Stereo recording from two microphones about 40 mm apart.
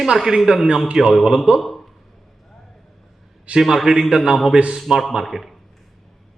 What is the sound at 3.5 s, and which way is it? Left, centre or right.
Speech, right.